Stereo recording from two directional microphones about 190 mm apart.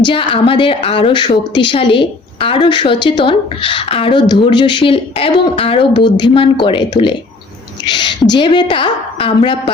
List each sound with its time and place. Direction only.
0.0 s a woman's voice: 25° left (ahead or behind)